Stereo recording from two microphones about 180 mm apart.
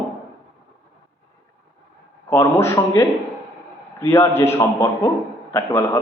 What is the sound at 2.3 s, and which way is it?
A man's voice, 15° left (ahead or behind).